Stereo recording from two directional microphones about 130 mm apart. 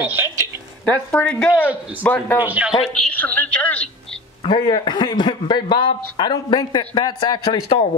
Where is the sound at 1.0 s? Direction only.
15° left (ahead or behind).